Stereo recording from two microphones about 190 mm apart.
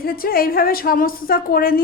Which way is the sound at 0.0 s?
50° left (ahead or behind).